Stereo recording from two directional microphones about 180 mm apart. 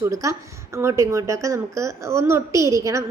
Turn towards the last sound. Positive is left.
turn(degrees=-15)  # may be behind; listen again after turning